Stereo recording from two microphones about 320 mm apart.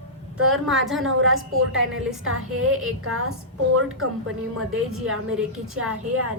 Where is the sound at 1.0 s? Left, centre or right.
Right.